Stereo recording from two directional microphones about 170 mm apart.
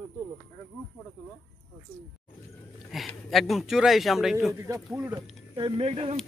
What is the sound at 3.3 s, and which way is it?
Speech, centre (ahead or behind).